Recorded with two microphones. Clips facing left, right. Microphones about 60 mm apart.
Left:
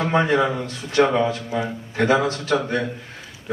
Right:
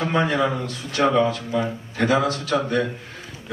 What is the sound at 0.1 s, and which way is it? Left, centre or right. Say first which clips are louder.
A man's voice: left 3 dB; left.